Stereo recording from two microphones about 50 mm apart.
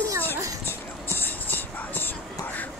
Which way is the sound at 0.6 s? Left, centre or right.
Left.